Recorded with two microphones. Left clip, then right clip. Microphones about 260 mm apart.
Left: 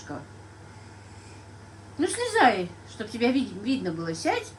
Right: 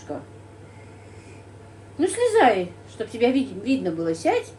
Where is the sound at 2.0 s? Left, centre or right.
Centre.